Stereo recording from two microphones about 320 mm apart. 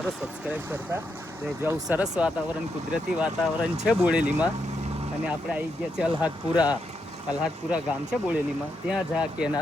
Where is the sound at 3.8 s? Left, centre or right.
Centre.